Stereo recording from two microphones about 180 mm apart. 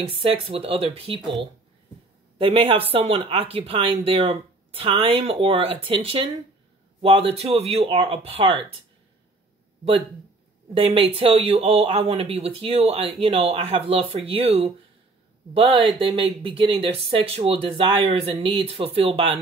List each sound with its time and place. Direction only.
0.1 s speech: 30° right (ahead or behind)
2.3 s a woman's voice: 30° right (ahead or behind)
10.8 s speech: 30° right (ahead or behind)